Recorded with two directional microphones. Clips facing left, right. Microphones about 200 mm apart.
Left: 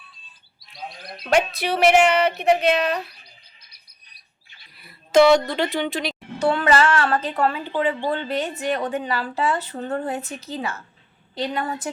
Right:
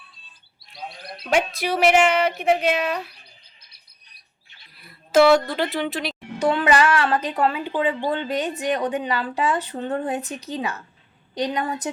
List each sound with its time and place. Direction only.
1.3 s a woman's voice: 10° right (ahead or behind)
4.7 s speech: centre (ahead or behind)
6.1 s a woman's voice: 15° right (ahead or behind)